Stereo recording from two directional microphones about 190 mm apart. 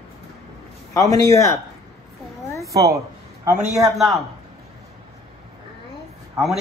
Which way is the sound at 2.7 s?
20° right (ahead or behind).